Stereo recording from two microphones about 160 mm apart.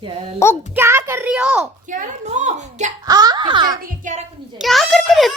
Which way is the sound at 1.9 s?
50° right (ahead or behind).